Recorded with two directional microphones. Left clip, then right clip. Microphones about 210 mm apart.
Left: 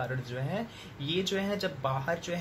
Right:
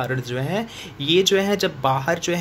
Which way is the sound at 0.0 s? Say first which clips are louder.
Right 10 dB; 50° right (ahead or behind).